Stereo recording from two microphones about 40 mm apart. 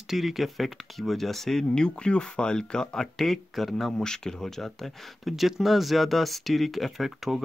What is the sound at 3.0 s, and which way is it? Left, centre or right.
Speech, centre.